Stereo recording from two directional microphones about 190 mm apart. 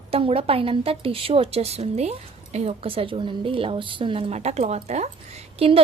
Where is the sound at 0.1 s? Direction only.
30° right (ahead or behind).